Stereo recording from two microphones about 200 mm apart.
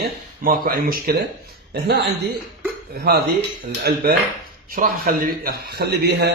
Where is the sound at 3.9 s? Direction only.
55° right (ahead or behind).